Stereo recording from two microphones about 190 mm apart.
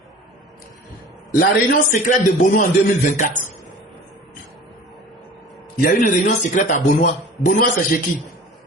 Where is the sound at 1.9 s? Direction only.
45° left (ahead or behind).